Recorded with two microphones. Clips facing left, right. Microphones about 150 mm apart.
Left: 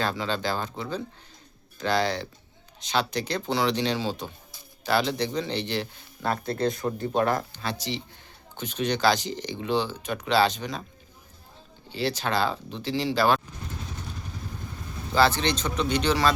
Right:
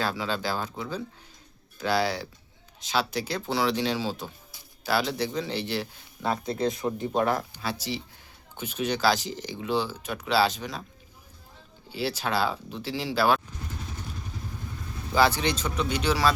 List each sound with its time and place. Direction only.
0.0 s speech: 5° right (ahead or behind)
11.9 s speech: 5° right (ahead or behind)
15.1 s speech: 10° right (ahead or behind)